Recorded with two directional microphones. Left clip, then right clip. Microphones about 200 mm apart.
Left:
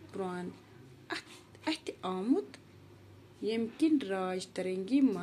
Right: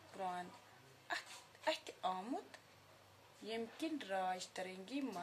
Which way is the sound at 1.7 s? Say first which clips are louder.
Left 4 dB; 20° left (ahead or behind).